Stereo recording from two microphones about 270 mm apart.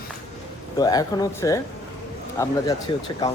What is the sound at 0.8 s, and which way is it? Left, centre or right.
Speech, centre.